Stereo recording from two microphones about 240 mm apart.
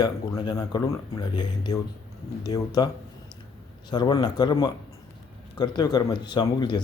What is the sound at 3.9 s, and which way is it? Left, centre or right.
Speech, centre.